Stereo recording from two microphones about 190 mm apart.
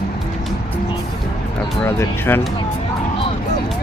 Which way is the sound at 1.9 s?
10° left (ahead or behind).